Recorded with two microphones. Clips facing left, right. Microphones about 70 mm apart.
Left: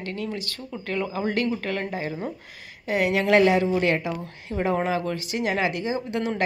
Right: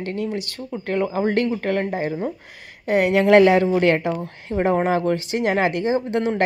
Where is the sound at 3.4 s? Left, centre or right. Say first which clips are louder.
Right 5 dB; right.